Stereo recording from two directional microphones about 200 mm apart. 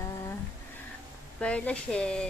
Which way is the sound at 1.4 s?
5° left (ahead or behind).